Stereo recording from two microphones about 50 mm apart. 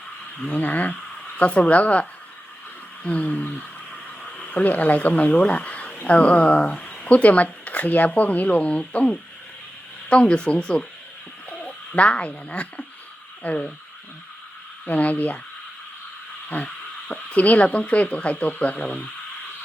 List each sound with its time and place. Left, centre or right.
0.3 s speech: left
14.8 s speech: left
16.5 s speech: left